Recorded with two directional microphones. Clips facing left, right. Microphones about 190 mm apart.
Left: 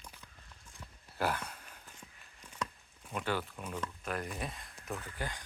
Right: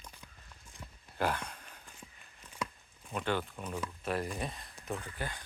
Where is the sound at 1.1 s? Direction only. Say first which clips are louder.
Right 1 dB; 5° left (ahead or behind).